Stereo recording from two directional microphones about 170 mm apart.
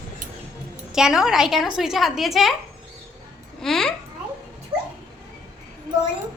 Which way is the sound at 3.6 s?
Centre (ahead or behind).